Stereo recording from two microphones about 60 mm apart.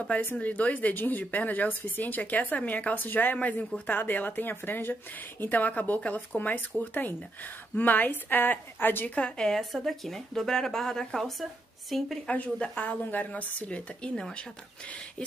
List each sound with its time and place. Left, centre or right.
0.0 s speech: left
9.1 s speech: centre
9.5 s speech: centre
12.3 s speech: left